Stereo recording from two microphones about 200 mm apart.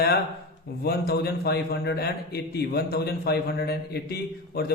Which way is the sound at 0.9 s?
50° left (ahead or behind).